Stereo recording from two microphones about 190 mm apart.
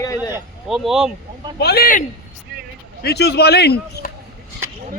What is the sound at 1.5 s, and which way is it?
Speech, 55° left (ahead or behind).